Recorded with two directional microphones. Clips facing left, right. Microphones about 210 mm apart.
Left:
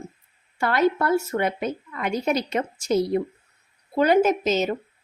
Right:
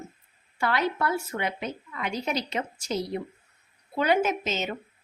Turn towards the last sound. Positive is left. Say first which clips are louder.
# left 7 dB
turn(degrees=40)  # may be behind; listen again after turning